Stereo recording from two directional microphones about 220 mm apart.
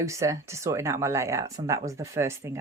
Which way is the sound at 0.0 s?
15° right (ahead or behind).